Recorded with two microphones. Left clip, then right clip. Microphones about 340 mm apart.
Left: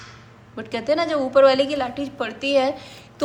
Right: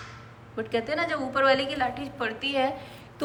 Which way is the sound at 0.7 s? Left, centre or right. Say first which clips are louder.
Left 6 dB; centre.